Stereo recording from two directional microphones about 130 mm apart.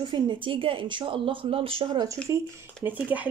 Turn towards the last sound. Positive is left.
turn(degrees=-10)  # may be behind; listen again after turning